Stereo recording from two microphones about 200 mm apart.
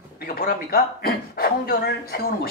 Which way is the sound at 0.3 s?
45° left (ahead or behind).